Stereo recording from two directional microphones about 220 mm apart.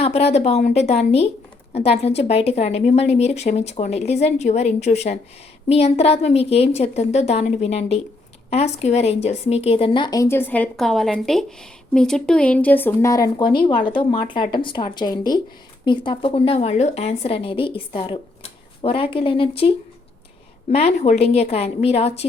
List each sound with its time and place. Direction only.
0.0 s speech: 25° left (ahead or behind)